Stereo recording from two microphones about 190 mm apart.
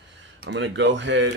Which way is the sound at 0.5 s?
70° right (ahead or behind).